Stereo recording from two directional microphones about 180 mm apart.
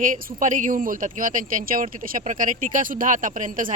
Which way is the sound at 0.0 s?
45° right (ahead or behind).